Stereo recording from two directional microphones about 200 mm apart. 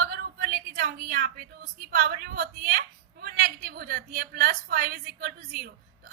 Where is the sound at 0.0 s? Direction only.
50° right (ahead or behind).